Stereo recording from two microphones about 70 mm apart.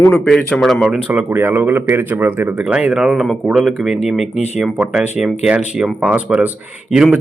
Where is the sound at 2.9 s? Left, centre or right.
Centre.